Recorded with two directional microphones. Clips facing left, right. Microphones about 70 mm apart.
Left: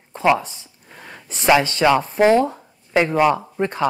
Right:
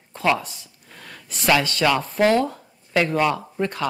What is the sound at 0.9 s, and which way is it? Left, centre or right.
Speech, centre.